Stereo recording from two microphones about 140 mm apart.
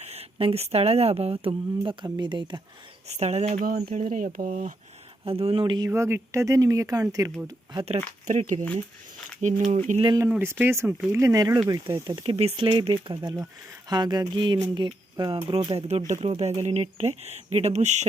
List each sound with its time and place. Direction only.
0.0 s speech: 45° right (ahead or behind)
3.1 s speech: 50° right (ahead or behind)
3.9 s speech: 80° right
5.2 s speech: 45° right (ahead or behind)
5.9 s speech: 15° right (ahead or behind)
8.3 s speech: 55° right (ahead or behind)
10.2 s speech: 15° right (ahead or behind); by 18.0 s 55° right (ahead or behind)